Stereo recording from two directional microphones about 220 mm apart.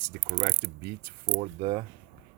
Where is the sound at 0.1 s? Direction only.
40° right (ahead or behind).